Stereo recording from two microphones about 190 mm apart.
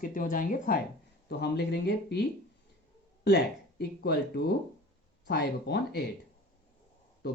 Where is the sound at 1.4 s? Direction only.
60° left (ahead or behind).